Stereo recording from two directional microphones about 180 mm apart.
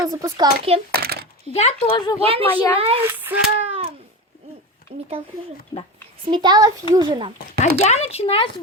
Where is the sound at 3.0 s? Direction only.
10° right (ahead or behind).